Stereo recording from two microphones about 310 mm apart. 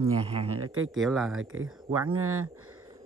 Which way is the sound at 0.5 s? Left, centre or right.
Right.